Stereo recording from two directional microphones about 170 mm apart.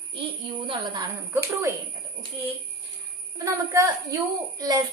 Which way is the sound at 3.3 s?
15° right (ahead or behind).